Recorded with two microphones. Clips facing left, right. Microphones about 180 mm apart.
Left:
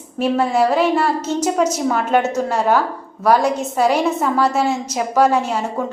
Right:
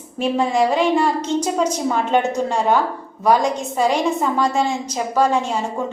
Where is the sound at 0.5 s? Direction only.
5° left (ahead or behind).